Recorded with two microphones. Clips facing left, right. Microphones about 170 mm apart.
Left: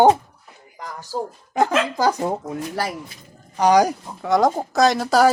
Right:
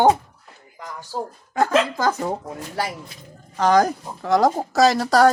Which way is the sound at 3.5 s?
15° left (ahead or behind).